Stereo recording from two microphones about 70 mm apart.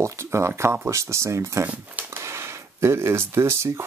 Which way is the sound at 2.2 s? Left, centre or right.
Right.